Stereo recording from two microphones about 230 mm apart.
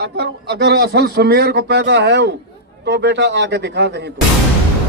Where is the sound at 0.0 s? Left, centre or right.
Right.